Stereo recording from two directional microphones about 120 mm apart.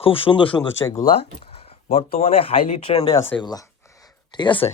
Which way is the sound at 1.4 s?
55° left (ahead or behind).